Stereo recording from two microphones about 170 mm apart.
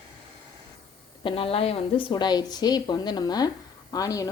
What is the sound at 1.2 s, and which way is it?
A woman's voice, 35° left (ahead or behind).